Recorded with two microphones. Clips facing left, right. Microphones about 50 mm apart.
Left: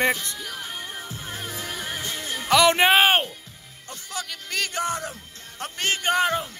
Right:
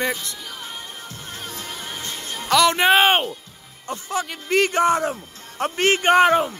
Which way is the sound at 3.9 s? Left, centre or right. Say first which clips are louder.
Right 8 dB; right.